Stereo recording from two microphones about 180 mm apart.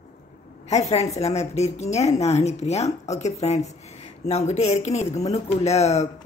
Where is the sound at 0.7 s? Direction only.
35° left (ahead or behind).